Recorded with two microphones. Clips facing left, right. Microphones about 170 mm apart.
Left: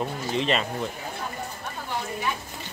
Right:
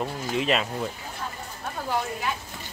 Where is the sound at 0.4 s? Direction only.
5° right (ahead or behind).